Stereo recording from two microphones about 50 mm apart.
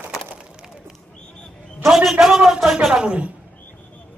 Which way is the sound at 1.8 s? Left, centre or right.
Centre.